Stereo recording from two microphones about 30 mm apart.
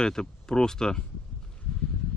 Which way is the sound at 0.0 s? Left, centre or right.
Left.